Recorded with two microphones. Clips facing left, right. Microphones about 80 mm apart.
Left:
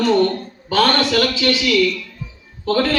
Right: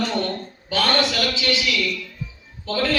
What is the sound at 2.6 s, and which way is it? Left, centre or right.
Speech, left.